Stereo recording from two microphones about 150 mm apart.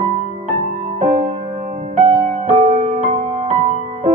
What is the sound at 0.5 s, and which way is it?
Music, 55° right (ahead or behind).